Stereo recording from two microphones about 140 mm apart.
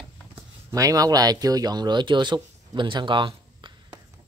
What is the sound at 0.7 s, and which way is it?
Speech, 25° right (ahead or behind).